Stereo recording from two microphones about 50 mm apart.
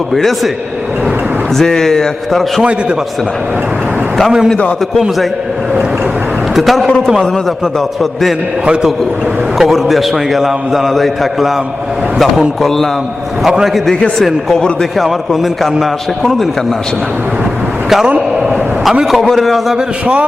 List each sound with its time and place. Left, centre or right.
0.1 s a man's voice: centre
1.5 s a man's voice: centre
6.6 s a man's voice: centre
8.6 s a man's voice: centre
9.6 s a man's voice: centre
12.6 s a man's voice: centre
13.4 s a man's voice: centre
14.9 s a man's voice: centre
17.8 s a man's voice: centre
18.3 s a sound: centre
19.2 s a man's voice: centre